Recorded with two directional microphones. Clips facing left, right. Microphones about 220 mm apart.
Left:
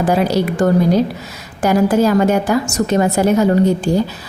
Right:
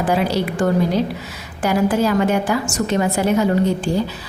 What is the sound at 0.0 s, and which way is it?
A woman's voice, 40° left (ahead or behind).